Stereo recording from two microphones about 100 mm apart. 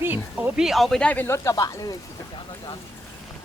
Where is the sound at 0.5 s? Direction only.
5° right (ahead or behind); by 1.4 s 15° left (ahead or behind).